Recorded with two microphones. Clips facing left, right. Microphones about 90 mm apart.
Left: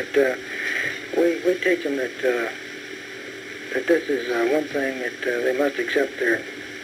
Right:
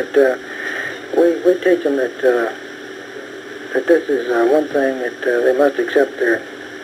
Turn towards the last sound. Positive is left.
turn(degrees=-45)  # may be behind; listen again after turning